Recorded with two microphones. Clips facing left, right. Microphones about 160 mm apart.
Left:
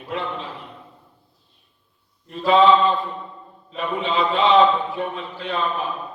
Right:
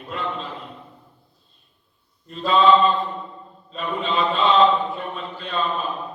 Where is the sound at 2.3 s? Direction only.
75° left (ahead or behind).